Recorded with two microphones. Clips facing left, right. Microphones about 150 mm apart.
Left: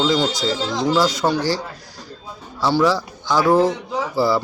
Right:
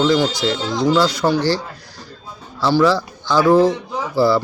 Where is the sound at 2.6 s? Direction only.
20° left (ahead or behind).